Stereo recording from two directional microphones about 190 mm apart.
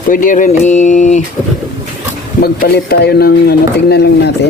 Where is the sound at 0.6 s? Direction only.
40° left (ahead or behind).